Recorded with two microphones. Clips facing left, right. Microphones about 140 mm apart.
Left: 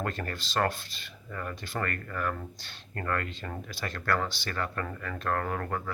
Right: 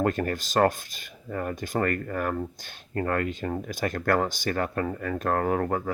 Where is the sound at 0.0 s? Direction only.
45° right (ahead or behind).